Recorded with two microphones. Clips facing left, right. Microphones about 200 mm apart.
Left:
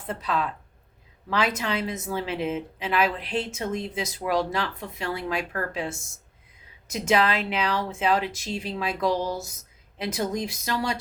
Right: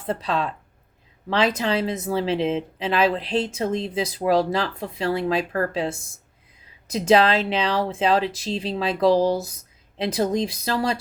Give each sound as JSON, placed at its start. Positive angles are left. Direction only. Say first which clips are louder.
{"t": 0.0, "sound": "a woman's voice", "louder": "right 3 dB", "side_deg": -30}